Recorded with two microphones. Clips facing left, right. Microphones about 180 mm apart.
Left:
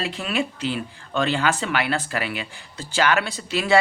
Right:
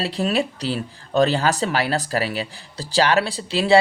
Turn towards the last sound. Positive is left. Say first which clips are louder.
# right 4 dB
turn(degrees=-30)  # may be behind; listen again after turning